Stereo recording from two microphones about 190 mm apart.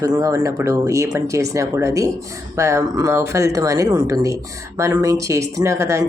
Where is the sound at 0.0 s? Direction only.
20° right (ahead or behind).